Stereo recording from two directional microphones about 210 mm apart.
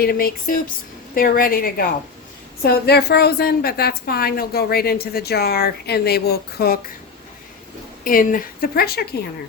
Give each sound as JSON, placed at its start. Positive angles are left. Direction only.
{"t": 0.0, "sound": "a woman's voice", "side_deg": 45}
{"t": 8.0, "sound": "a woman's voice", "side_deg": 40}